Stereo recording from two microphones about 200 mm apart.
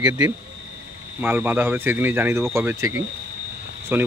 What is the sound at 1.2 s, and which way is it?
Speech, 10° right (ahead or behind).